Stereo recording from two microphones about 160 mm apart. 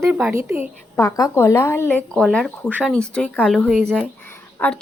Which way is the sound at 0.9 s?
15° left (ahead or behind).